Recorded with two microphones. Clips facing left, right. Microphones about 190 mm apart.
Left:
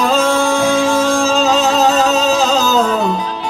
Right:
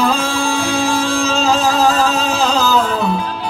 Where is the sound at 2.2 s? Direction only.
45° left (ahead or behind).